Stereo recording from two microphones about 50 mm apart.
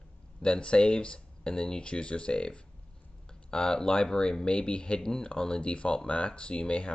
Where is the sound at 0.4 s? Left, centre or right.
Left.